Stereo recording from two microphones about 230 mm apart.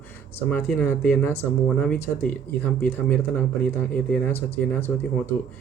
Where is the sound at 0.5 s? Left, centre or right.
Centre.